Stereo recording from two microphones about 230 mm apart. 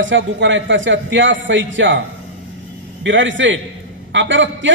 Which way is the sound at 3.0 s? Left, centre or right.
Right.